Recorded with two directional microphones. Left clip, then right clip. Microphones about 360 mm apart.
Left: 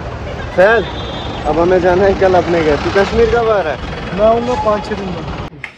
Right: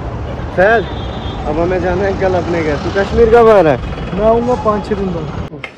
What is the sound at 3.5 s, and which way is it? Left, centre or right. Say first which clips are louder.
Speech: right 6 dB; right.